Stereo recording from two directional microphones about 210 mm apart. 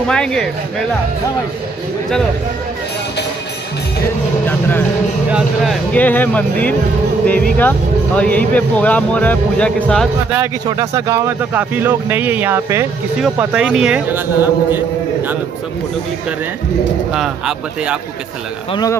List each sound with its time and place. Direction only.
0.1 s a man's voice: 5° left (ahead or behind)
4.5 s speech: 10° left (ahead or behind)
8.2 s speech: 5° left (ahead or behind)
10.3 s a man's voice: 15° right (ahead or behind)
17.1 s a man's voice: 5° right (ahead or behind)
18.7 s speech: 20° left (ahead or behind)